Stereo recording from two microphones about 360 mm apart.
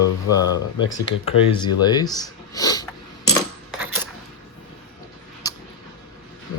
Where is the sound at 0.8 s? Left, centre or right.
Left.